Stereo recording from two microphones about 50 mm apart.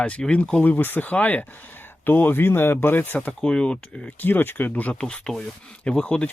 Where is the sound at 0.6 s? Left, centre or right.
Left.